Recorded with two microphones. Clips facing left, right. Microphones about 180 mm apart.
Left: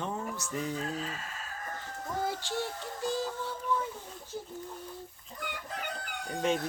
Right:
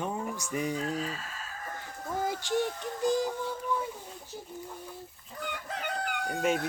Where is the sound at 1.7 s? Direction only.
15° right (ahead or behind).